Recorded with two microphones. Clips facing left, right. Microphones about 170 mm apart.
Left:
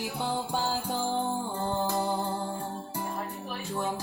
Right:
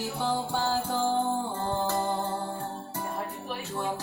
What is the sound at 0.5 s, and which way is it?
Music, 15° left (ahead or behind).